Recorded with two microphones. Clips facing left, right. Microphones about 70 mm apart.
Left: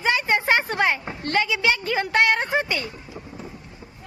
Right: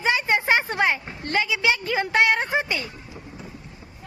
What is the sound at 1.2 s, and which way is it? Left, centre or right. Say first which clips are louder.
A woman's voice: left 1 dB; centre.